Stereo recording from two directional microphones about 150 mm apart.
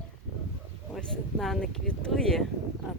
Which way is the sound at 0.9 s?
Centre (ahead or behind).